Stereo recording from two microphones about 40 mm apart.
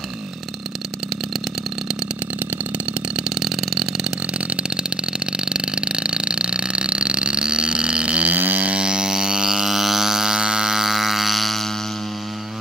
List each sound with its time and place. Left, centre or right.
3.3 s engine: centre
4.3 s a sound: right
8.7 s didgeridoo: centre